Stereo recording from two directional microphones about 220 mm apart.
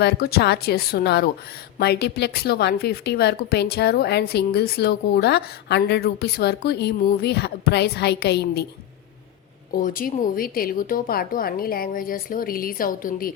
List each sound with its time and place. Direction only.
0.0 s a woman's voice: 45° left (ahead or behind)
9.7 s speech: 40° left (ahead or behind)